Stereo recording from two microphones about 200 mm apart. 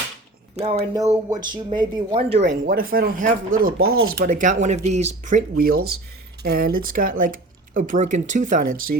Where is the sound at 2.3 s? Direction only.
35° right (ahead or behind).